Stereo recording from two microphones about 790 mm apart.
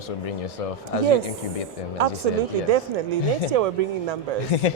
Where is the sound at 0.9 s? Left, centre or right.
Left.